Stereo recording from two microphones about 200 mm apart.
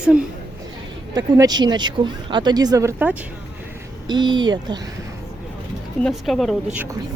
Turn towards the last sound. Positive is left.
turn(degrees=0)  # may be behind; listen again after turning